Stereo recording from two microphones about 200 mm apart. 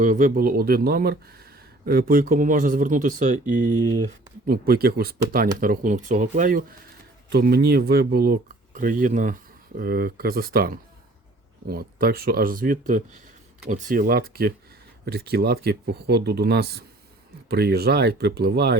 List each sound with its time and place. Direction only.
0.0 s speech: 40° right (ahead or behind)
7.3 s speech: 55° right (ahead or behind)